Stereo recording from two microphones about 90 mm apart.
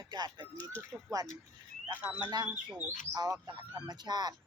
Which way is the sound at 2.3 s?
50° right (ahead or behind).